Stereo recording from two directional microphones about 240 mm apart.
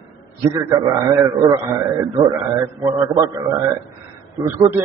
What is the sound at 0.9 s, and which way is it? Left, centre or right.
A man's voice, centre.